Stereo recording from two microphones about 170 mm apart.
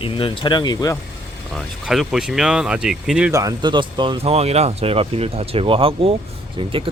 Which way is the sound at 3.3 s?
25° right (ahead or behind).